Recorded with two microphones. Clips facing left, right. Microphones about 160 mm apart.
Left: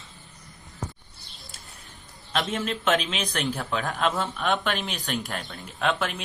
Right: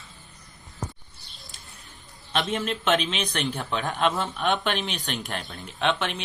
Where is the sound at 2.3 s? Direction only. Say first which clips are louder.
Right 1 dB; centre (ahead or behind).